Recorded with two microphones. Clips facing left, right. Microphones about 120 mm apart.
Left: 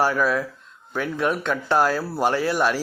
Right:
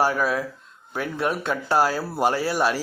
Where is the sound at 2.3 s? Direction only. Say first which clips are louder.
Left 1 dB; 40° right (ahead or behind).